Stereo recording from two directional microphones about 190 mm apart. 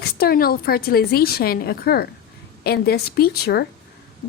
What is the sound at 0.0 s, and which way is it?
A woman's voice, 55° left (ahead or behind).